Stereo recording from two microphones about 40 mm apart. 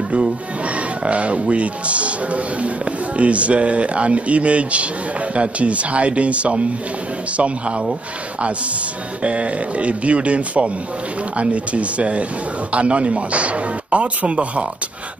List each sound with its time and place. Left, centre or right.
1.0 s speech: right
9.2 s speech: right